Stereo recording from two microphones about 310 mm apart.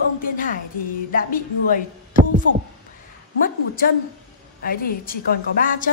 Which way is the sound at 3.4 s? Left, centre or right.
Left.